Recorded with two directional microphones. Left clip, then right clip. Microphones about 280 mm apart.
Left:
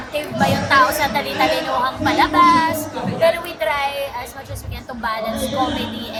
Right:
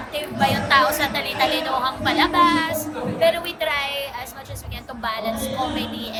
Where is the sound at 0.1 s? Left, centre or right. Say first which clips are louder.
Left 2 dB; centre.